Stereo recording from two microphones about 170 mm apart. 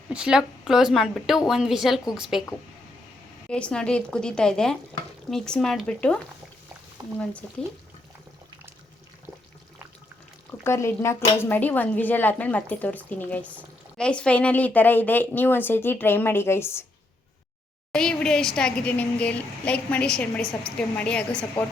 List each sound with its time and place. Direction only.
0.1 s a woman's voice: 5° right (ahead or behind)
3.5 s a woman's voice: 5° left (ahead or behind)
7.0 s speech: 25° right (ahead or behind)
10.6 s speech: 15° left (ahead or behind)
17.9 s a woman's voice: 5° left (ahead or behind)